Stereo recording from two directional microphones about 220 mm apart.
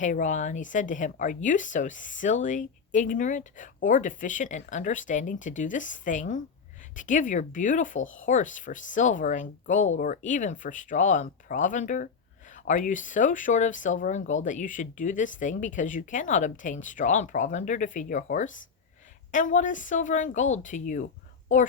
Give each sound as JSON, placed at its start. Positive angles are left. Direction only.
{"t": 0.0, "sound": "speech", "side_deg": 35}